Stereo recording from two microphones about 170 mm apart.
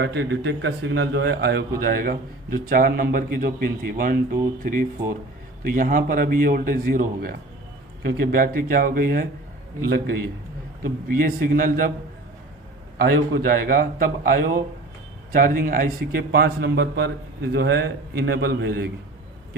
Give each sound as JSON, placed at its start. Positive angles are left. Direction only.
{"t": 0.0, "sound": "a man's voice", "side_deg": -85}
{"t": 1.8, "sound": "a man's voice", "side_deg": -60}
{"t": 10.8, "sound": "a man's voice", "side_deg": -55}
{"t": 13.0, "sound": "a man's voice", "side_deg": -60}